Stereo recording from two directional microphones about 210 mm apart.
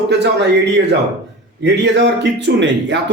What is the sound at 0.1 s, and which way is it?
Speech, 55° right (ahead or behind).